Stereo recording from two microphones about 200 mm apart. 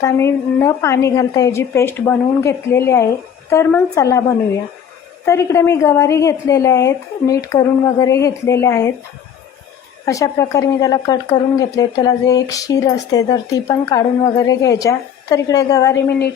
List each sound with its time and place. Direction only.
0.0 s speech: 15° left (ahead or behind)
5.2 s speech: 15° left (ahead or behind)
10.1 s speech: 15° left (ahead or behind)